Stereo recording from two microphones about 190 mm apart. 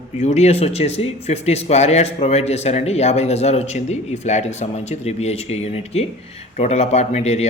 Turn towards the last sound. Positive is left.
turn(degrees=35)  # may be behind; listen again after turning